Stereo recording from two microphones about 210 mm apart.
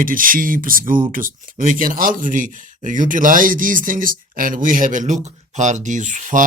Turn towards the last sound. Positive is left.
turn(degrees=-35)  # may be behind; listen again after turning